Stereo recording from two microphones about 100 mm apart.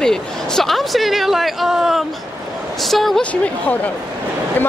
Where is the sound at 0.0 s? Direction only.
5° left (ahead or behind).